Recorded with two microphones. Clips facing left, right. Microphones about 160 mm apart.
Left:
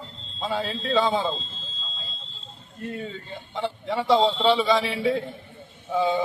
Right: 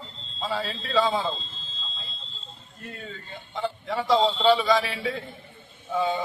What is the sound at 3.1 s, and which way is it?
A man's voice, 25° left (ahead or behind).